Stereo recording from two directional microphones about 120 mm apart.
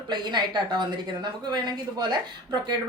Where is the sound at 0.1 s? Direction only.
40° right (ahead or behind).